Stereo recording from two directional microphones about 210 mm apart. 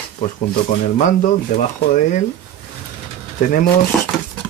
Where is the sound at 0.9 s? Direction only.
35° left (ahead or behind).